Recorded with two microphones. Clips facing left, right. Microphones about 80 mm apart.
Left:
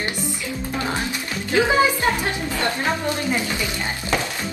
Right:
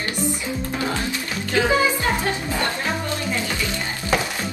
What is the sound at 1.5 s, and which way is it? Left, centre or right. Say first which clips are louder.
Speech: left 2 dB; left.